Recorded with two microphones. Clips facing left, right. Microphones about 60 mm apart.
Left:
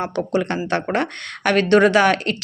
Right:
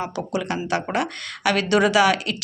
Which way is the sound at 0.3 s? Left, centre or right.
Left.